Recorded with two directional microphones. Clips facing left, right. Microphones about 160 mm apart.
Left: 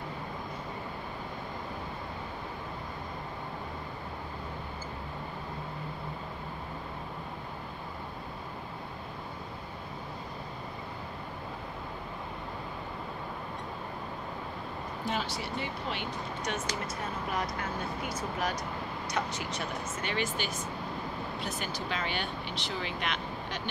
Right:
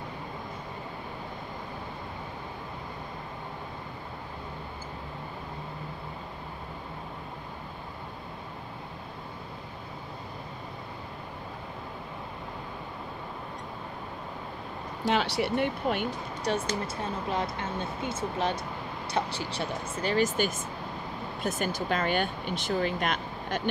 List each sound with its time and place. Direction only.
15.0 s speech: 75° right (ahead or behind); by 16.1 s 55° right (ahead or behind)
16.4 s speech: 30° right (ahead or behind); by 23.7 s 45° right (ahead or behind)